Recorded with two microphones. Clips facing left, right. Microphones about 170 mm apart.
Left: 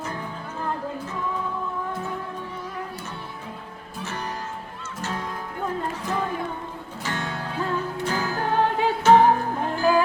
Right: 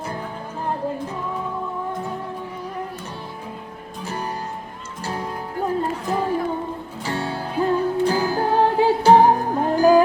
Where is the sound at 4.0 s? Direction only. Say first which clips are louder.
Right 3 dB; 35° right (ahead or behind).